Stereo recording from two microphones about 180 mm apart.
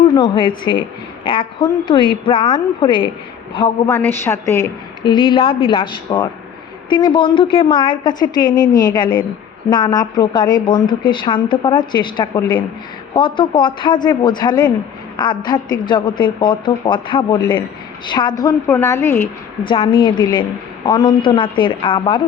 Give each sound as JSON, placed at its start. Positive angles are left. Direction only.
{"t": 0.1, "sound": "a woman's voice", "side_deg": 25}
{"t": 3.8, "sound": "a woman's voice", "side_deg": 15}
{"t": 19.6, "sound": "a woman's voice", "side_deg": 30}